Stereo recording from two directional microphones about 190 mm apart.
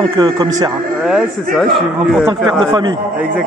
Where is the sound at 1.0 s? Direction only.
Centre (ahead or behind).